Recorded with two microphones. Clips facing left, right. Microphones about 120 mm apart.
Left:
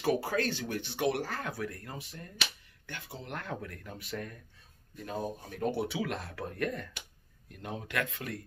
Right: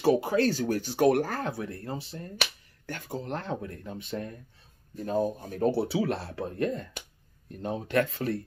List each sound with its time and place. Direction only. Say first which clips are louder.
0.4 s speech: right 7 dB; 40° right (ahead or behind)
1.4 s speech: right 4 dB; 25° right (ahead or behind)
2.9 s speech: right 8 dB; 40° right (ahead or behind); by 4.4 s 25° right (ahead or behind)
4.9 s speech: right 9 dB; 40° right (ahead or behind)